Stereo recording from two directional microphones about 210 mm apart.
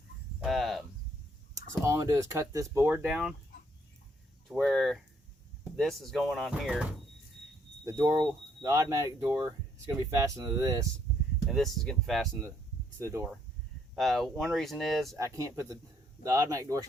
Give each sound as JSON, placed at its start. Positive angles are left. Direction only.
{"t": 0.4, "sound": "a sound", "side_deg": 0}
{"t": 1.8, "sound": "speech", "side_deg": -15}
{"t": 3.1, "sound": "speech", "side_deg": 0}
{"t": 4.4, "sound": "speech", "side_deg": 0}
{"t": 7.9, "sound": "speech", "side_deg": -15}
{"t": 11.4, "sound": "speech", "side_deg": 0}
{"t": 13.0, "sound": "speech", "side_deg": -10}
{"t": 13.9, "sound": "speech", "side_deg": 0}
{"t": 15.2, "sound": "speech", "side_deg": -15}